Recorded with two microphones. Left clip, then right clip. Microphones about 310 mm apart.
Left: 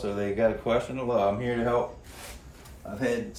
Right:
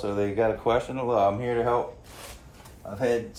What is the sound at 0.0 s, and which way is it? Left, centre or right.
Speech, right.